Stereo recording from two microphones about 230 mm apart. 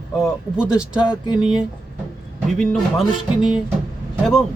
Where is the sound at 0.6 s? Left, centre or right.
Centre.